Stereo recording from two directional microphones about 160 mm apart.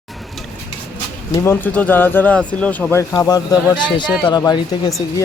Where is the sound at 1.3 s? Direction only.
20° left (ahead or behind).